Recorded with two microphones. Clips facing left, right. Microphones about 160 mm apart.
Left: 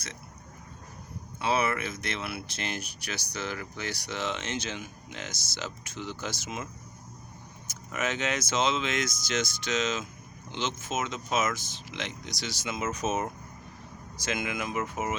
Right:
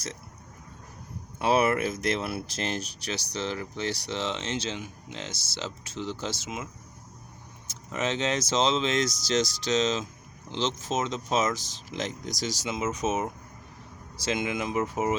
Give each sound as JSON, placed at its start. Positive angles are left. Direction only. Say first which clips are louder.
{"t": 1.4, "sound": "speech", "louder": "right 5 dB", "side_deg": -40}
{"t": 7.7, "sound": "speech", "louder": "right 2 dB", "side_deg": -30}
{"t": 12.6, "sound": "speech", "louder": "right 1 dB", "side_deg": -25}
{"t": 14.2, "sound": "speech", "louder": "right 3 dB", "side_deg": -30}